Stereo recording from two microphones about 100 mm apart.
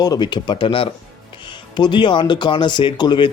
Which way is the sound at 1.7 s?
50° left (ahead or behind).